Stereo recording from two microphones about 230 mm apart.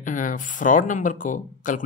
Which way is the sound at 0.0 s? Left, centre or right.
Left.